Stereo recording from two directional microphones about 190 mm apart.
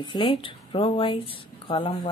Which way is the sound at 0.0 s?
25° left (ahead or behind).